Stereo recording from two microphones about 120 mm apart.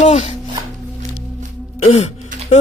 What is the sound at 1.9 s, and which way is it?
Speech, 70° left (ahead or behind).